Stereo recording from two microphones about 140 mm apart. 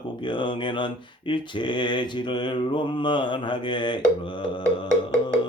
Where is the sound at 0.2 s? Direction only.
35° left (ahead or behind).